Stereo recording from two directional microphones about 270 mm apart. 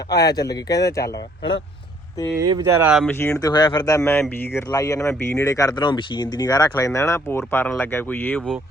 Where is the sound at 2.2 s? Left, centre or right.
Centre.